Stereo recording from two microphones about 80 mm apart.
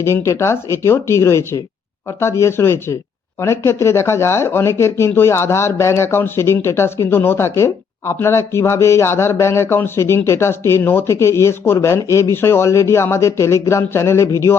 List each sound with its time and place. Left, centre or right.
0.0 s speech: left